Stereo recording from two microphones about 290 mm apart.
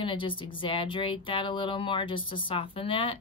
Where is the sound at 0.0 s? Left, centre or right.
Centre.